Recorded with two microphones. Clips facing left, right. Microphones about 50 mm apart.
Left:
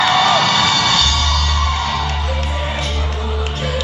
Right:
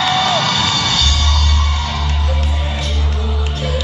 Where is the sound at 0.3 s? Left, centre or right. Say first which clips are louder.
Left 2 dB; centre.